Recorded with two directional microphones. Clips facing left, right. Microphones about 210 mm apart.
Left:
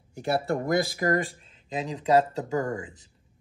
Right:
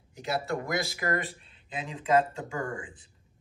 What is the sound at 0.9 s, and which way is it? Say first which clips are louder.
Speech: left 5 dB; 40° left (ahead or behind).